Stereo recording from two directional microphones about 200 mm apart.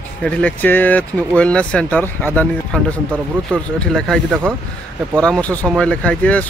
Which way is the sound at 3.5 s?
5° left (ahead or behind).